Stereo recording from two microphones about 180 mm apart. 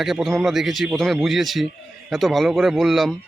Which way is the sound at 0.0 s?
Centre (ahead or behind).